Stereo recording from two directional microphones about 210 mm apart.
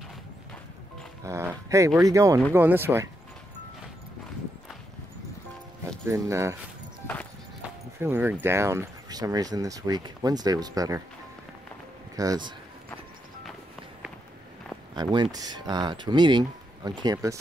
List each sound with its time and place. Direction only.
1.2 s speech: 15° right (ahead or behind)
5.9 s speech: 15° right (ahead or behind)
7.6 s speech: 10° right (ahead or behind)
12.2 s speech: 20° right (ahead or behind)
15.0 s speech: 20° right (ahead or behind)